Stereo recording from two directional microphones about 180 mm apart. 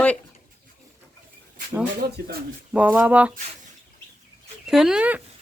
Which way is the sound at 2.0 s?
60° right (ahead or behind).